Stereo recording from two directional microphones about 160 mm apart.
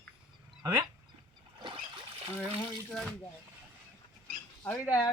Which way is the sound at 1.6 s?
35° right (ahead or behind).